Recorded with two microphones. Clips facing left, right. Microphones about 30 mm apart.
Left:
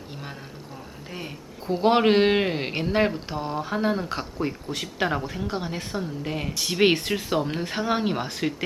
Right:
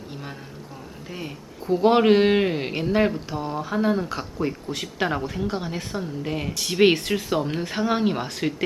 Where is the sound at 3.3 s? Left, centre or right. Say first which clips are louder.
Right 1 dB; centre.